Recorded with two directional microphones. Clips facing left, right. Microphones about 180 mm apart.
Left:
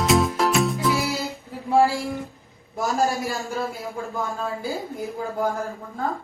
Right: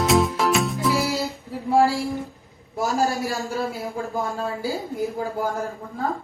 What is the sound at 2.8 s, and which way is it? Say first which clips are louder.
Speech: even; centre (ahead or behind).